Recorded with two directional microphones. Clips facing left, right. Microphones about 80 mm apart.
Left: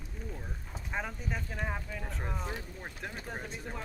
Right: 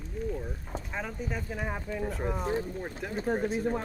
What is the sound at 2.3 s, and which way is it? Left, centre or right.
Speech, right.